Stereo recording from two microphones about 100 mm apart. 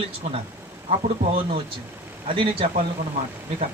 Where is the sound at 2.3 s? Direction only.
65° right (ahead or behind).